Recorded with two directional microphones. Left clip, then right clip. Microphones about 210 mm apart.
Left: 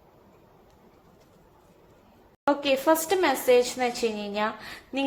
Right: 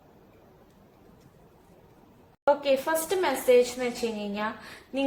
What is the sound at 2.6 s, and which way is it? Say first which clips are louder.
A woman's voice: left 3 dB; 35° left (ahead or behind).